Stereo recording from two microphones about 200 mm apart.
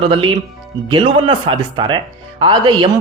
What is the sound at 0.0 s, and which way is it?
A man's voice, 25° right (ahead or behind).